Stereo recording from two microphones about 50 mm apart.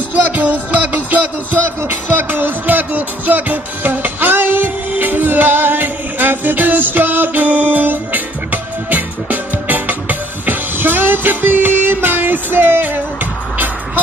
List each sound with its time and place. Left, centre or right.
0.4 s music: right